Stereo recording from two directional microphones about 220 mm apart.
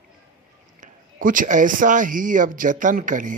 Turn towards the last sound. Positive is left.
turn(degrees=-35)  # may be behind; listen again after turning